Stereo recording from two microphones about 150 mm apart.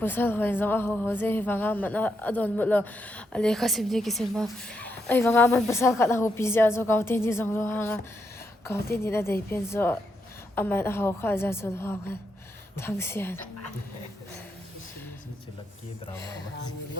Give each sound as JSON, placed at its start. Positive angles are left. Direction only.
{"t": 0.0, "sound": "speech", "side_deg": 15}